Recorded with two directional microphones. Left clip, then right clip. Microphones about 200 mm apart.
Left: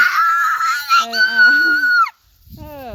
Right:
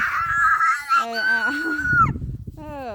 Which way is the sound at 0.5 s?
5° right (ahead or behind).